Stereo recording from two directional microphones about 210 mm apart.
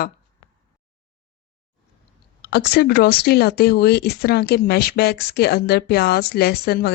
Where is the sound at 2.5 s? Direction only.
50° left (ahead or behind).